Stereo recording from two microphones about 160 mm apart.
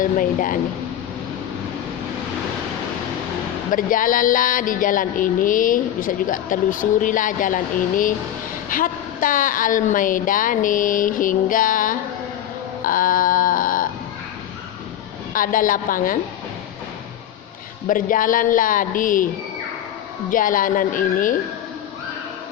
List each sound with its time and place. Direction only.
0.0 s speech: 55° left (ahead or behind)
3.7 s speech: 60° left (ahead or behind)
15.3 s speech: 60° left (ahead or behind)
17.8 s speech: 60° left (ahead or behind)
20.3 s speech: 60° left (ahead or behind)